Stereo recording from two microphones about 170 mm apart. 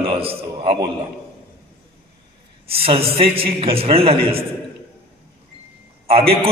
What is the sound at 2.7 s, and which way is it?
A man's voice, 35° right (ahead or behind).